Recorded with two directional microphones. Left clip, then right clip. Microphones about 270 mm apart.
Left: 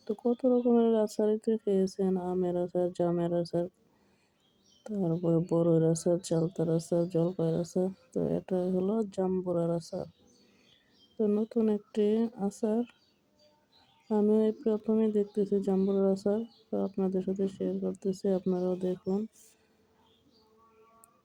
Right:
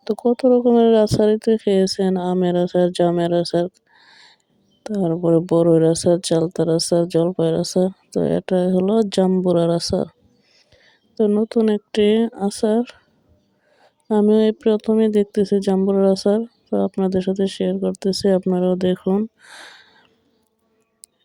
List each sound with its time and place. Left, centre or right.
0.0 s speech: right
4.8 s speech: right
11.2 s speech: right
14.1 s speech: right